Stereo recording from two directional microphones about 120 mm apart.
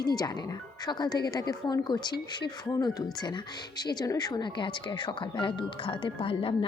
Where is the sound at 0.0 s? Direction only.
35° left (ahead or behind).